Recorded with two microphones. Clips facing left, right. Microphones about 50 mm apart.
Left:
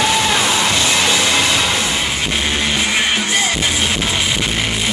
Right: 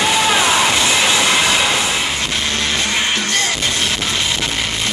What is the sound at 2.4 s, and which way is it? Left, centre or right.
Music, centre.